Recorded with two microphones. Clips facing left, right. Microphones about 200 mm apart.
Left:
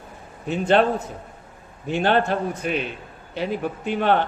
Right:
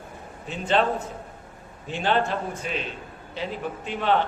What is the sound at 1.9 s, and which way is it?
Speech, 60° left (ahead or behind).